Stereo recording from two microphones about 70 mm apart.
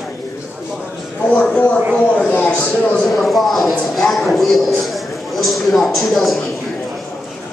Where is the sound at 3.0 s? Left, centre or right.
Centre.